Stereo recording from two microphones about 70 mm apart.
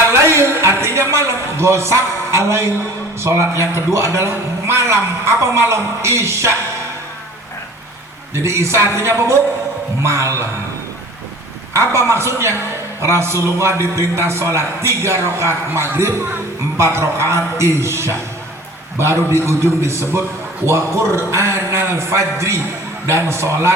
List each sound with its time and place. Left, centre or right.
0.1 s a sound: right
3.2 s a man's voice: right
8.4 s a man's voice: right
10.0 s music: right
11.7 s a man's voice: right